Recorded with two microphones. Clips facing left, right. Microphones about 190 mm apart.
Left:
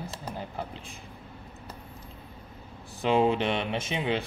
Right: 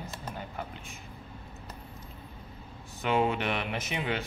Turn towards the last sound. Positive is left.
turn(degrees=25)  # may be behind; listen again after turning